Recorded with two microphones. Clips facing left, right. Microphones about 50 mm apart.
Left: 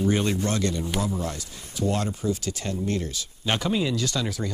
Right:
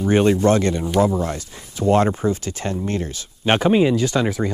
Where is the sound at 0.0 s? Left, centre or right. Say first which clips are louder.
Right 8 dB; right.